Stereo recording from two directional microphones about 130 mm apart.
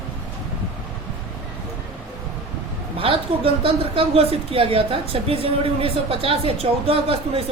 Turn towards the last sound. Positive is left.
turn(degrees=-45)  # may be behind; listen again after turning